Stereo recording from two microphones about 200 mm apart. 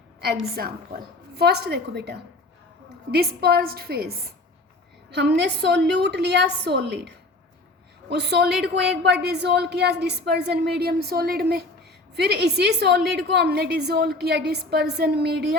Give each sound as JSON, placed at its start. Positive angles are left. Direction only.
{"t": 0.2, "sound": "a woman's voice", "side_deg": -50}
{"t": 5.1, "sound": "a woman's voice", "side_deg": -60}
{"t": 8.1, "sound": "a woman's voice", "side_deg": -55}